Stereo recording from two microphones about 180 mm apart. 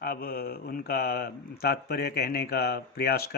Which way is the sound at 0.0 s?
55° left (ahead or behind).